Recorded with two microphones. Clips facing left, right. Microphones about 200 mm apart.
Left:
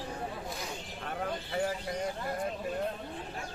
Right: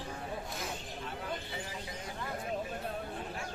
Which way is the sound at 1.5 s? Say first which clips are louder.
Left 9 dB; 50° left (ahead or behind).